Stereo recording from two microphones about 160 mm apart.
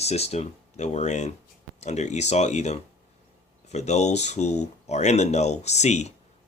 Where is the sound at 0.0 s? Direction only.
40° left (ahead or behind).